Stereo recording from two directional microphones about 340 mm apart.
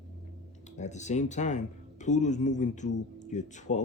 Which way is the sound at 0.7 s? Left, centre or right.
Left.